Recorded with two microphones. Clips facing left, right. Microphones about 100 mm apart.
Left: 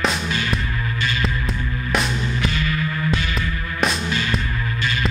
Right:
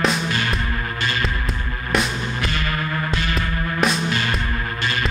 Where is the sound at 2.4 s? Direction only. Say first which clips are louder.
Left 1 dB; 55° right (ahead or behind).